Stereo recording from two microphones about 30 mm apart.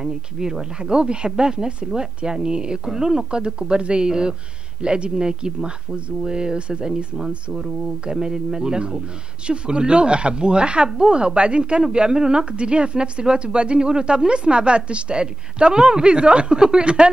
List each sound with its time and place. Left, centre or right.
0.0 s speech: centre
2.8 s a woman's voice: centre
7.2 s speech: centre
9.5 s a woman's voice: right